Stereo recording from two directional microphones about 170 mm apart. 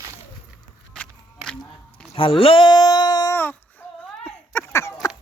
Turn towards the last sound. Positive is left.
turn(degrees=20)  # may be behind; listen again after turning